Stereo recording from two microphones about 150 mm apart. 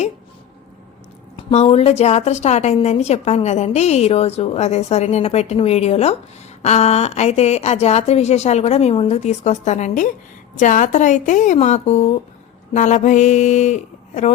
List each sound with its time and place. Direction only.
1.4 s a woman's voice: 40° left (ahead or behind)